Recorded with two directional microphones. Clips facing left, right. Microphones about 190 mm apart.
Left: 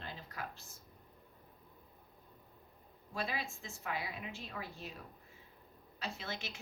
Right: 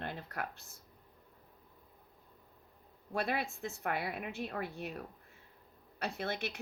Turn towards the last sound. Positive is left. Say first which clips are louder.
# right 6 dB
turn(degrees=-60)  # may be behind; listen again after turning